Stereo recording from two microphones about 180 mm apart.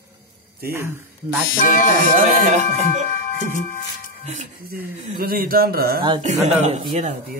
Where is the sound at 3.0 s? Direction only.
45° left (ahead or behind).